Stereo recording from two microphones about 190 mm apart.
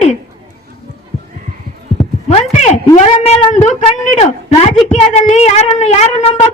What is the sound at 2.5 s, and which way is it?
Speech, 35° left (ahead or behind).